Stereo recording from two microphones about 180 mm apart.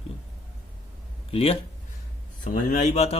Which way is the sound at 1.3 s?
30° left (ahead or behind).